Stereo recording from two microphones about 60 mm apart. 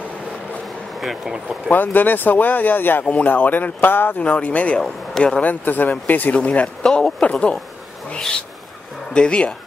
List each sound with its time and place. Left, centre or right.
1.0 s speech: centre
1.7 s speech: left
4.2 s speech: left
5.5 s speech: left
9.1 s speech: centre